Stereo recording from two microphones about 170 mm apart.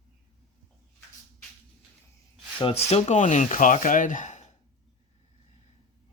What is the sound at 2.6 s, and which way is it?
Speech, 35° left (ahead or behind).